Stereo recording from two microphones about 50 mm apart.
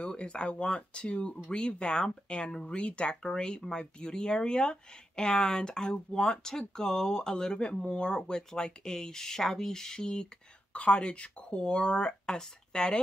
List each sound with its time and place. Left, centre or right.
0.0 s speech: centre
10.7 s speech: left